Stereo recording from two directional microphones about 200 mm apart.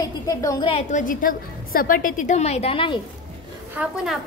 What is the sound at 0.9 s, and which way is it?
A woman's voice, 40° left (ahead or behind).